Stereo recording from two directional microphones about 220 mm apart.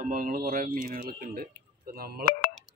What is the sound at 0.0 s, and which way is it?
Speech, 40° right (ahead or behind).